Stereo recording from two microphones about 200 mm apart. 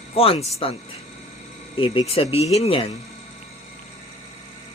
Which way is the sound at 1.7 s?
25° left (ahead or behind).